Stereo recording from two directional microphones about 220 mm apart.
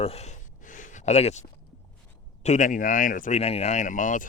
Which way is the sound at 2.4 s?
35° left (ahead or behind).